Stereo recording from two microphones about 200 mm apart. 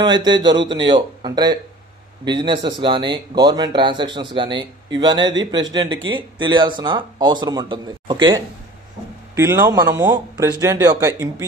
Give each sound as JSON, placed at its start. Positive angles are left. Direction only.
{"t": 0.0, "sound": "speech", "side_deg": -20}